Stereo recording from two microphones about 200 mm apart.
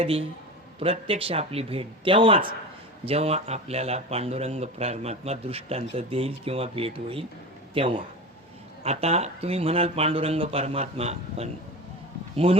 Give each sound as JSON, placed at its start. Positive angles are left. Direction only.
{"t": 0.0, "sound": "speech", "side_deg": -30}